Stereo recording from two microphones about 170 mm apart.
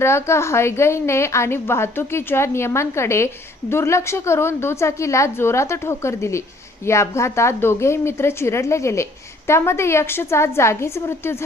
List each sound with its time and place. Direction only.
0.0 s a woman's voice: 15° left (ahead or behind)